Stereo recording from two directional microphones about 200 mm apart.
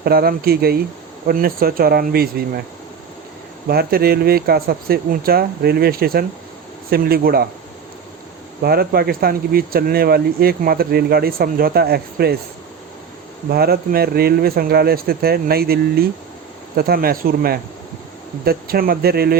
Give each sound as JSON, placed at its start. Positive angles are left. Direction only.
{"t": 0.0, "sound": "speech", "side_deg": -50}
{"t": 3.7, "sound": "speech", "side_deg": -50}
{"t": 8.6, "sound": "speech", "side_deg": -50}
{"t": 13.5, "sound": "speech", "side_deg": -50}